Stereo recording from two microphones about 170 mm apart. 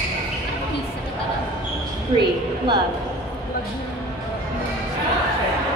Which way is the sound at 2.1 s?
30° right (ahead or behind).